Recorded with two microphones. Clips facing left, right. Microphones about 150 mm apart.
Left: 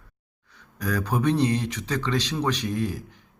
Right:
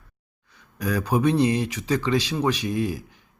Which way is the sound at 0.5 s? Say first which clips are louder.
Right 2 dB; 10° right (ahead or behind).